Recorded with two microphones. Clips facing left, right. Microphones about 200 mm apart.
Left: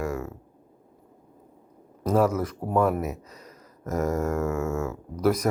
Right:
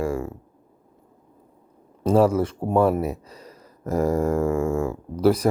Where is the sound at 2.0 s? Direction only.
30° right (ahead or behind).